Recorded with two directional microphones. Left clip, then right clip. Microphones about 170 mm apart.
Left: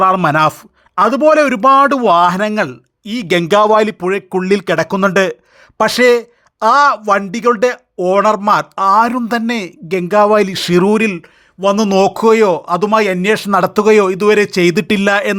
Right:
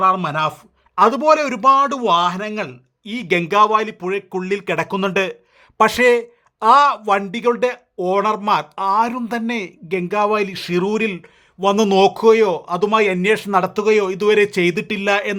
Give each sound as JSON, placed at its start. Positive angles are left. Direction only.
{"t": 0.0, "sound": "speech", "side_deg": 40}
{"t": 0.9, "sound": "speech", "side_deg": 25}
{"t": 3.0, "sound": "speech", "side_deg": 25}
{"t": 3.5, "sound": "speech", "side_deg": 40}
{"t": 4.6, "sound": "speech", "side_deg": 20}
{"t": 4.9, "sound": "speech", "side_deg": 30}
{"t": 5.7, "sound": "speech", "side_deg": 15}
{"t": 11.6, "sound": "speech", "side_deg": 10}
{"t": 11.9, "sound": "speech", "side_deg": 30}
{"t": 14.8, "sound": "speech", "side_deg": 40}